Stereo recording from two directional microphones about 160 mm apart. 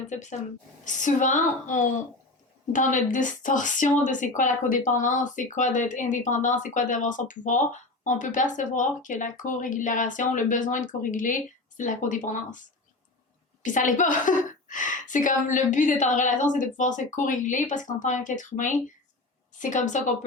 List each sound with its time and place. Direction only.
0.1 s speech: 50° left (ahead or behind)
13.7 s speech: 50° left (ahead or behind)